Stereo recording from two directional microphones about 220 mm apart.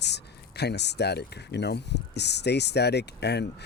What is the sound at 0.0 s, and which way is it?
Speech, 50° left (ahead or behind).